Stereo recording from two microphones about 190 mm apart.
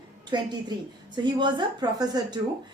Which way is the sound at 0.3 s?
25° right (ahead or behind).